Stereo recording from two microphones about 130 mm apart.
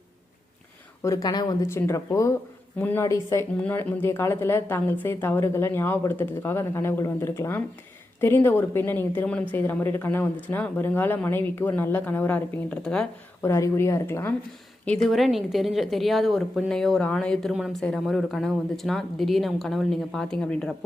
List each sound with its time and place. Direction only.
1.0 s speech: 25° left (ahead or behind)
3.6 s a woman's voice: 10° left (ahead or behind)
13.4 s speech: 20° left (ahead or behind)
14.8 s a woman's voice: centre (ahead or behind)
17.5 s a woman's voice: 5° right (ahead or behind)